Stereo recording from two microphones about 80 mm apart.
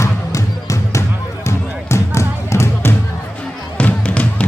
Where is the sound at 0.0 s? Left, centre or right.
Left.